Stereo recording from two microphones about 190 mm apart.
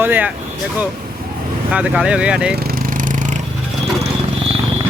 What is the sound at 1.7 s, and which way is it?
Speech, 5° right (ahead or behind).